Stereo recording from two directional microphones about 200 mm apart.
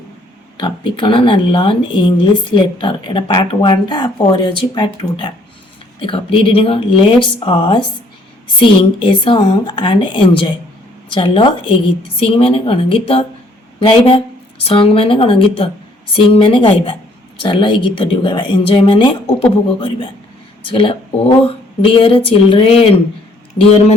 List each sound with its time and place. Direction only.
0.5 s speech: 25° left (ahead or behind)
20.6 s speech: 25° left (ahead or behind)